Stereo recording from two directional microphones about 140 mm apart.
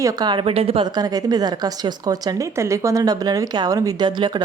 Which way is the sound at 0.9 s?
25° right (ahead or behind).